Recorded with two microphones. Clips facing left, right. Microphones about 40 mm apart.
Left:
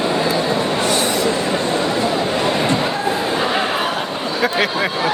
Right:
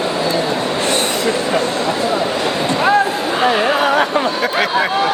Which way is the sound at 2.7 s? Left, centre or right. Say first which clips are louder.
Right 5 dB; right.